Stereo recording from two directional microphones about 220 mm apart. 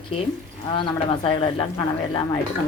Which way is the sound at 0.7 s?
20° left (ahead or behind).